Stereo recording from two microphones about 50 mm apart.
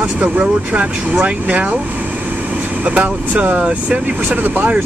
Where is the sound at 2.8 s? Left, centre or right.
Right.